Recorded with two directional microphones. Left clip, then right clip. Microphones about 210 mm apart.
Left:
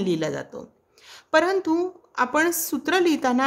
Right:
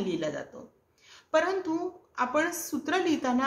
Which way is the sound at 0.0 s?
55° left (ahead or behind).